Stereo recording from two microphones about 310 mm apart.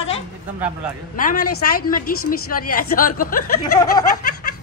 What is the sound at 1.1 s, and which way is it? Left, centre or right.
A woman's voice, left.